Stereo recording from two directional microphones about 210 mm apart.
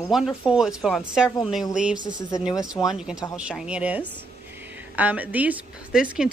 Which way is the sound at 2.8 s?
5° right (ahead or behind).